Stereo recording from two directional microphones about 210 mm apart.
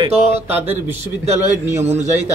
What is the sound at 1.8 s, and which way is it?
Speech, 30° right (ahead or behind).